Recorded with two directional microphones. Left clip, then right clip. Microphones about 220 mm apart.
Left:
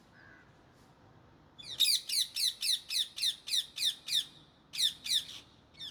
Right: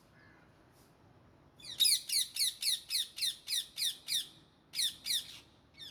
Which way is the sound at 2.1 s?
Centre (ahead or behind).